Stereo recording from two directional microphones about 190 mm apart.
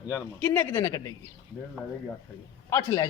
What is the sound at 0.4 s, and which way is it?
Speech, 10° left (ahead or behind).